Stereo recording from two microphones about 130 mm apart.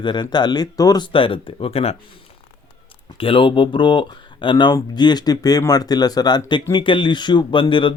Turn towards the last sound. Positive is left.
turn(degrees=40)  # may be behind; listen again after turning